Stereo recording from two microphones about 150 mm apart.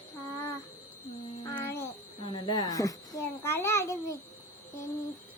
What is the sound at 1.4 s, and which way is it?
Music, 20° left (ahead or behind).